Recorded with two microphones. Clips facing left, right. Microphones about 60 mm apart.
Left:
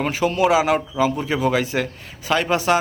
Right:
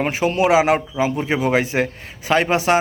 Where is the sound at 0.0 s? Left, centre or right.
Right.